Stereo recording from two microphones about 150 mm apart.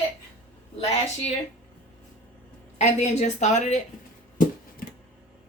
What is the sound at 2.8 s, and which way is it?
A woman's voice, 50° left (ahead or behind).